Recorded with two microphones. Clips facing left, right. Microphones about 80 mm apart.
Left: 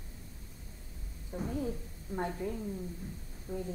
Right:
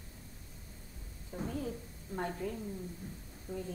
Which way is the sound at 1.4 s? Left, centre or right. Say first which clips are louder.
Left 3 dB; left.